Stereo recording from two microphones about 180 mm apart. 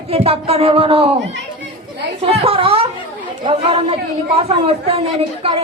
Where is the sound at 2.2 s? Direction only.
35° right (ahead or behind).